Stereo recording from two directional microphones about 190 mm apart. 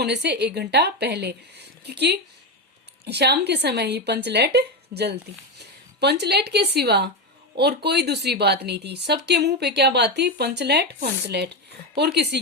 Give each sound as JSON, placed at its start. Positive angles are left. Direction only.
{"t": 0.0, "sound": "a woman's voice", "side_deg": -65}